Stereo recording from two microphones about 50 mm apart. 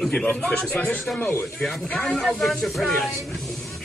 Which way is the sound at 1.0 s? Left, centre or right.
Centre.